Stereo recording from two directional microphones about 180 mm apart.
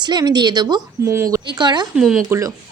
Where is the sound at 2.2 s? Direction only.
20° right (ahead or behind).